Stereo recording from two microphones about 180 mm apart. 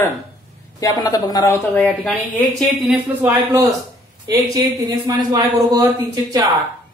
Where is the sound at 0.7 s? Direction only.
20° left (ahead or behind).